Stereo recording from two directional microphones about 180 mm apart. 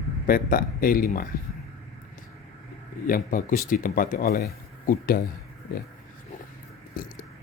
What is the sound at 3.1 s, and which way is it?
A man's voice, 50° left (ahead or behind).